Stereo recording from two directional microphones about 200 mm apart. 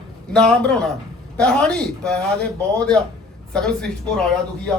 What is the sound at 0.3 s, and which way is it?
A man's voice, 5° left (ahead or behind).